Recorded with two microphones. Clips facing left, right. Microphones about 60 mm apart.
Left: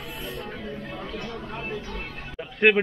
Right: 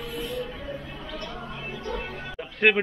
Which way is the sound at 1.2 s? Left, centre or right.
Left.